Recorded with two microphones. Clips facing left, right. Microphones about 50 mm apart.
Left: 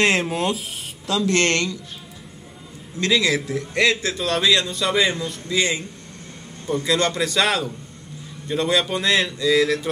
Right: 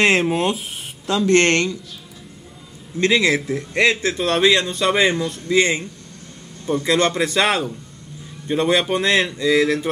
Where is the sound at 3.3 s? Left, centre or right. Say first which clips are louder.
Right 2 dB; centre.